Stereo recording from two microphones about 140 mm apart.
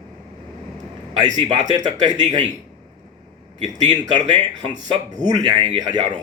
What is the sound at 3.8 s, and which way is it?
Speech, 30° right (ahead or behind).